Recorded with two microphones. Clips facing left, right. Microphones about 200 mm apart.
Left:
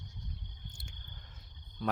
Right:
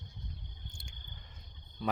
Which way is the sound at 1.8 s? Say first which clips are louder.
Even; centre (ahead or behind).